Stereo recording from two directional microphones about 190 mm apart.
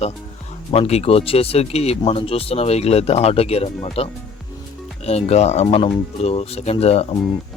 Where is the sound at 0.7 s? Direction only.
30° left (ahead or behind).